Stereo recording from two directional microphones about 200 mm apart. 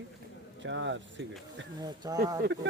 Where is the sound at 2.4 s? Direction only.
60° right (ahead or behind).